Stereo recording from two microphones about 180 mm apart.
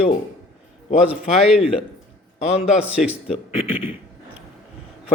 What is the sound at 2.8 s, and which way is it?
Speech, 5° right (ahead or behind).